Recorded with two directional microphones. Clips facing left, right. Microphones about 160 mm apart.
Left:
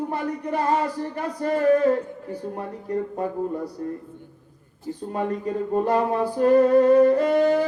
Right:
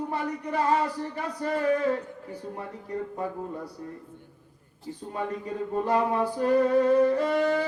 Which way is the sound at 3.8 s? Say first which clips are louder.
Left 9 dB; 60° left (ahead or behind).